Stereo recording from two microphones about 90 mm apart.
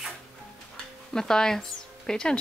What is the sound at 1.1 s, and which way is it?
Speech, 5° left (ahead or behind).